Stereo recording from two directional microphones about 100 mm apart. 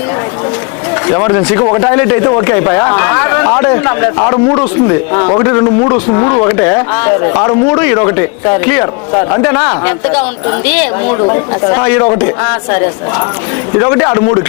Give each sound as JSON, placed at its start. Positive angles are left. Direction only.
{"t": 1.0, "sound": "speech", "side_deg": 25}